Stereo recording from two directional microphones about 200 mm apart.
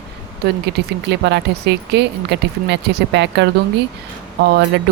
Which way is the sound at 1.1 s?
60° right (ahead or behind).